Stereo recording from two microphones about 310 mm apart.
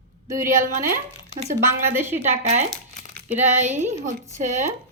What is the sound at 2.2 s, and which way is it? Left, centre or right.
Speech, right.